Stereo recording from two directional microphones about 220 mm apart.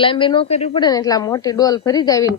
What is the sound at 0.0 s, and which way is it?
Speech, 25° left (ahead or behind).